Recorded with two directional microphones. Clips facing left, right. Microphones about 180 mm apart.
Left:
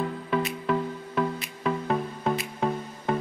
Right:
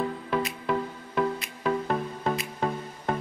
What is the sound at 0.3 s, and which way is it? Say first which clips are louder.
Music: left 3 dB; centre (ahead or behind).